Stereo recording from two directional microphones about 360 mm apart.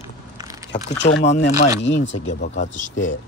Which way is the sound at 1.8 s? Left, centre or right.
Left.